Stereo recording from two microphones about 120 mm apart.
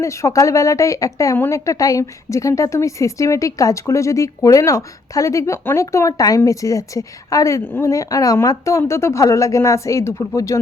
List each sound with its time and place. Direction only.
0.0 s a woman's voice: 25° left (ahead or behind)